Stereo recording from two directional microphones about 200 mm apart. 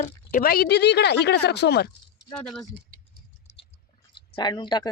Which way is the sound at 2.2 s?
5° left (ahead or behind).